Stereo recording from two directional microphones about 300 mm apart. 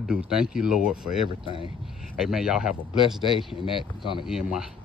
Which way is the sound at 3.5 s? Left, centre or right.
Centre.